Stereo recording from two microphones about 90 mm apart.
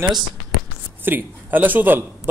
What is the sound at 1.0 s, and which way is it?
A man's voice, 20° right (ahead or behind).